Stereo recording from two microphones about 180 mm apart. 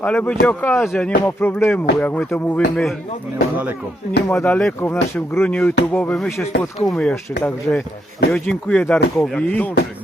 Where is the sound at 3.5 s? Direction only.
10° right (ahead or behind).